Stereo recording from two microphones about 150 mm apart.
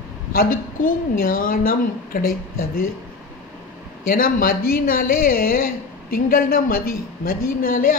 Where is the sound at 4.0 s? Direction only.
70° left (ahead or behind).